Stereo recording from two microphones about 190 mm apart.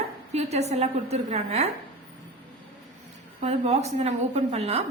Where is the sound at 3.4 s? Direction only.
35° right (ahead or behind).